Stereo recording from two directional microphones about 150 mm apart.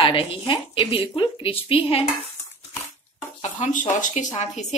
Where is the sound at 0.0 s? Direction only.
35° left (ahead or behind).